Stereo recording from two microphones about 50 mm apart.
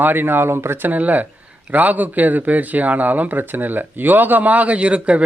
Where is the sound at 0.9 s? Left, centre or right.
Right.